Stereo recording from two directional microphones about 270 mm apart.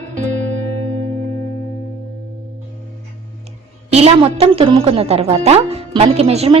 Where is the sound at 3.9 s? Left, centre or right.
Right.